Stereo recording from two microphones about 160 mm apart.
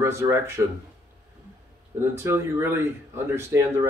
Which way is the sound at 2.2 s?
15° right (ahead or behind).